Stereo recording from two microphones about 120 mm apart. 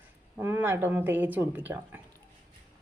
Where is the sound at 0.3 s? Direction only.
20° right (ahead or behind).